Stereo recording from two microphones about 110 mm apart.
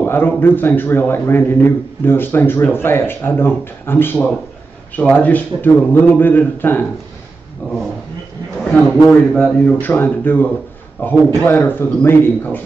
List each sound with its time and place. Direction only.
0.0 s a man's voice: 20° left (ahead or behind)
9.3 s a man's voice: 5° left (ahead or behind)